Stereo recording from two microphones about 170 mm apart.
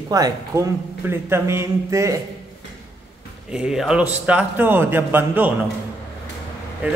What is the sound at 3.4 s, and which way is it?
Speech, 5° right (ahead or behind).